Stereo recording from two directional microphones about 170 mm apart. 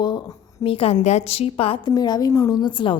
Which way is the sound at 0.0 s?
25° left (ahead or behind).